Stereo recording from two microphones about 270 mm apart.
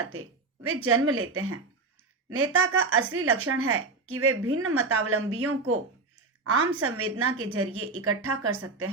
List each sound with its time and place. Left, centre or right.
0.9 s a woman's voice: right